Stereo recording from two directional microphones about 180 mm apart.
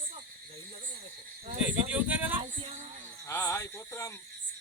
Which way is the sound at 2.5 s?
40° right (ahead or behind).